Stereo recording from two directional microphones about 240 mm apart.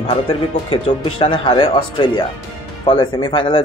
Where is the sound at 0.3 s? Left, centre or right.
Left.